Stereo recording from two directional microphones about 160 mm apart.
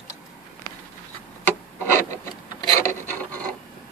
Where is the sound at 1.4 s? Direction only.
15° left (ahead or behind).